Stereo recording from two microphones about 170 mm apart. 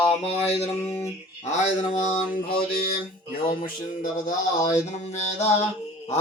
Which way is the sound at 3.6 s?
55° left (ahead or behind).